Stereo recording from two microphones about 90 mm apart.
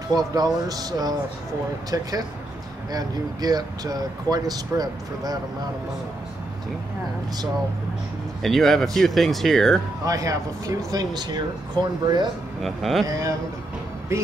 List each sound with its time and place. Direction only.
0.1 s speech: 45° right (ahead or behind)
8.4 s speech: 5° left (ahead or behind)
10.0 s speech: 40° right (ahead or behind)
11.8 s speech: 55° right (ahead or behind)
12.6 s speech: centre (ahead or behind)
14.1 s speech: 30° right (ahead or behind)